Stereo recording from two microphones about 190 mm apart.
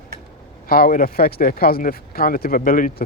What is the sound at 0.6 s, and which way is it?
Speech, 50° left (ahead or behind).